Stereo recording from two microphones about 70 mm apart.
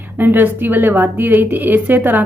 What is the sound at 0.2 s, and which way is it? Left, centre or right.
A woman's voice, right.